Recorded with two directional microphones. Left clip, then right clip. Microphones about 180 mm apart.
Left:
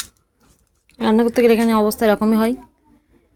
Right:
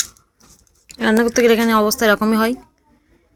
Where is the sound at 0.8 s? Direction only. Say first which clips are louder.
Right 1 dB; 5° left (ahead or behind).